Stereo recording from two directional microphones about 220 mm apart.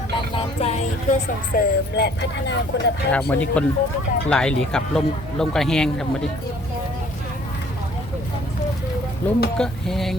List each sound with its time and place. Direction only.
0.3 s speech: 30° left (ahead or behind)
2.0 s speech: 50° left (ahead or behind)
3.1 s speech: 5° left (ahead or behind)
9.2 s speech: 5° left (ahead or behind)